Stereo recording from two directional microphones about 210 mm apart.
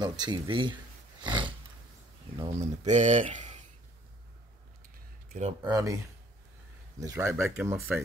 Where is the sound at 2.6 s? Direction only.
35° right (ahead or behind).